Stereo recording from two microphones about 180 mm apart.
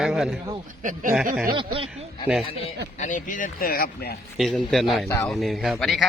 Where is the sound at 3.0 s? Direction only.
45° left (ahead or behind).